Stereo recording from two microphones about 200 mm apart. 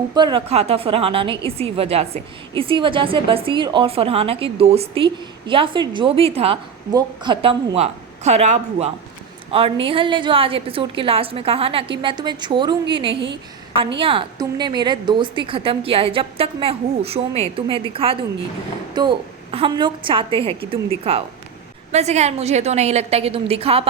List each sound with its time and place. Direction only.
0.1 s a woman's voice: 20° right (ahead or behind)